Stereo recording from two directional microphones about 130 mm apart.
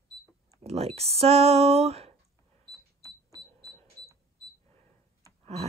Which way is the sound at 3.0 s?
25° right (ahead or behind).